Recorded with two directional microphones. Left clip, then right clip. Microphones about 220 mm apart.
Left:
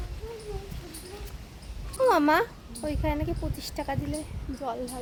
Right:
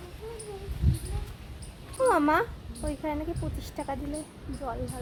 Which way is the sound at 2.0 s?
15° left (ahead or behind).